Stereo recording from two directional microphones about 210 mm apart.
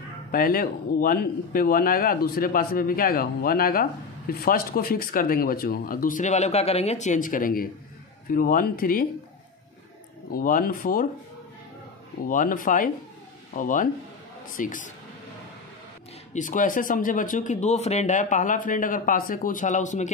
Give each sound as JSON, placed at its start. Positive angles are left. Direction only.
{"t": 0.3, "sound": "speech", "side_deg": 45}
{"t": 10.3, "sound": "speech", "side_deg": 40}
{"t": 12.3, "sound": "speech", "side_deg": 40}
{"t": 16.3, "sound": "speech", "side_deg": 40}